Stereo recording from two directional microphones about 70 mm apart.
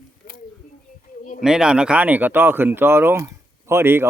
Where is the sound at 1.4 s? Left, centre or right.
Centre; by 4.1 s right.